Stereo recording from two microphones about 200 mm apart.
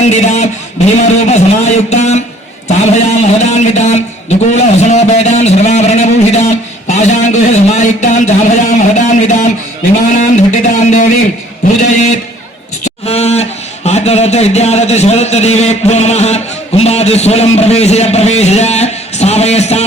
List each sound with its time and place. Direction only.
0.0 s a man's voice: 35° left (ahead or behind)
13.1 s speech: 30° left (ahead or behind)